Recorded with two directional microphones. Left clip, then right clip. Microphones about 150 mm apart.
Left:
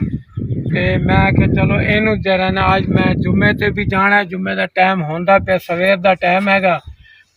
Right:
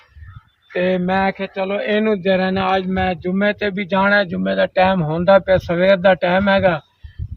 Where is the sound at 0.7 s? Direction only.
30° right (ahead or behind); by 4.7 s 85° right.